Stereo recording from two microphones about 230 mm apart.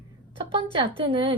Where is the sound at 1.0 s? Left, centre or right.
Right.